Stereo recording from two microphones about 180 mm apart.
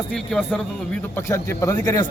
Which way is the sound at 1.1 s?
15° left (ahead or behind).